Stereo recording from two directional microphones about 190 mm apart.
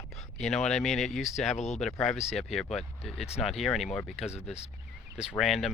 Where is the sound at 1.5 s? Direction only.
35° left (ahead or behind).